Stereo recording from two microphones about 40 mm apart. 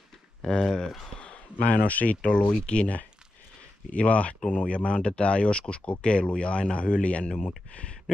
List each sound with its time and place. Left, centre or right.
0.4 s speech: centre
1.2 s a sound: left
1.8 s speech: left